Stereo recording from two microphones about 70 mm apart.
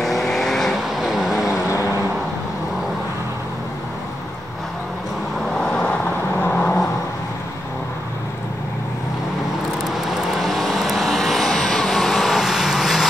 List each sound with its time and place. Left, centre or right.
0.0 s vehicle: centre
5.6 s vehicle: centre
6.4 s vehicle: left
9.8 s vehicle: centre